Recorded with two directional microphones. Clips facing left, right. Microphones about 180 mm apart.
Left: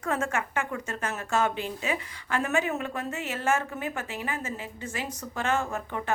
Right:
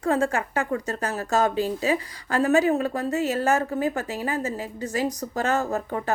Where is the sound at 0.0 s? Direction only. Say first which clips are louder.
Right 6 dB; 30° right (ahead or behind).